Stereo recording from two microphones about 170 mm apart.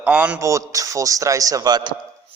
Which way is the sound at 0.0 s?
10° right (ahead or behind).